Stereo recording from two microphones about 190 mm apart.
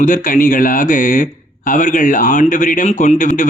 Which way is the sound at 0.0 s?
45° left (ahead or behind).